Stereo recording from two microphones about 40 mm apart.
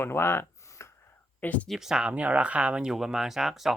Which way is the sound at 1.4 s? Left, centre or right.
Left.